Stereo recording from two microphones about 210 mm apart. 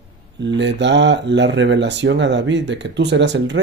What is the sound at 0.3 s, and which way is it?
Speech, 60° right (ahead or behind).